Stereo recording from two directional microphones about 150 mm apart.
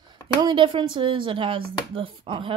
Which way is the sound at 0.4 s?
30° right (ahead or behind).